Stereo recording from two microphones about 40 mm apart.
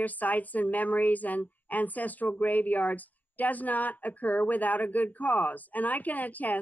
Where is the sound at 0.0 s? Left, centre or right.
Left.